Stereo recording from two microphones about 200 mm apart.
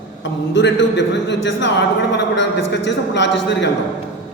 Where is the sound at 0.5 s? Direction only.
60° left (ahead or behind).